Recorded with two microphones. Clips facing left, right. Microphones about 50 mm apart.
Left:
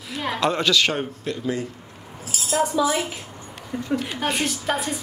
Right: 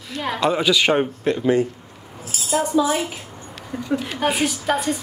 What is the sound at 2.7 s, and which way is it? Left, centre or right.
Speech, right.